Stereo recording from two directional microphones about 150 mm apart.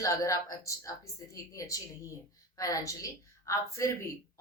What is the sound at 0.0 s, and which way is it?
A woman's voice, 20° left (ahead or behind).